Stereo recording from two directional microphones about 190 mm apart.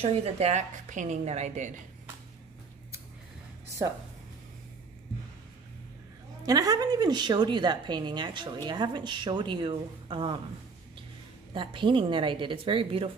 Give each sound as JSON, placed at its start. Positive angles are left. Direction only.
{"t": 0.0, "sound": "a woman's voice", "side_deg": -35}
{"t": 6.4, "sound": "a woman's voice", "side_deg": -20}
{"t": 11.5, "sound": "a woman's voice", "side_deg": -25}